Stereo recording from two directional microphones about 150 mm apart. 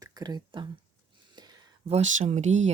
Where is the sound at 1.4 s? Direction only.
30° right (ahead or behind).